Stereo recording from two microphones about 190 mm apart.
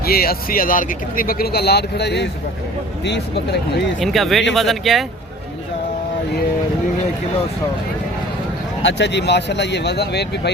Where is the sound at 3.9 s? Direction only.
Centre (ahead or behind).